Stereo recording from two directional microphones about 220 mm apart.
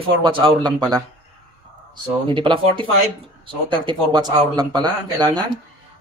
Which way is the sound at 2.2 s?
25° right (ahead or behind).